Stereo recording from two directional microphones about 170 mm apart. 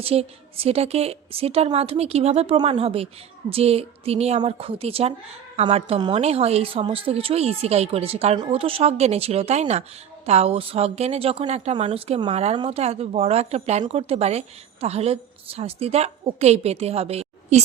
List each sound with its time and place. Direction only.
0.0 s speech: 35° right (ahead or behind)